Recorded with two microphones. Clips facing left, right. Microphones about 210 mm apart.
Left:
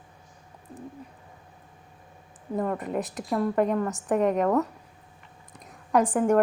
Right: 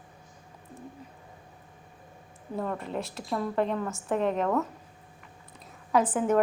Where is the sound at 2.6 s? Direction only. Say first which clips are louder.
Left 4 dB; 5° left (ahead or behind).